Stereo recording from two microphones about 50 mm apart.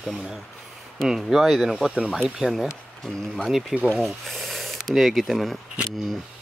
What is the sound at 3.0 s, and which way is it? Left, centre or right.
Speech, centre.